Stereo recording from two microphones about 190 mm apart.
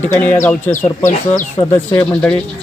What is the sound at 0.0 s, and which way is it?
Speech, 10° left (ahead or behind).